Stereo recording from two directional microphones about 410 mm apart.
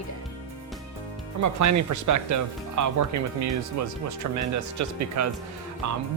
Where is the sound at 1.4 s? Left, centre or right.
Right.